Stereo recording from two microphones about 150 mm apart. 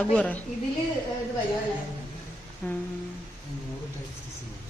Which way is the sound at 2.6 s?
10° left (ahead or behind).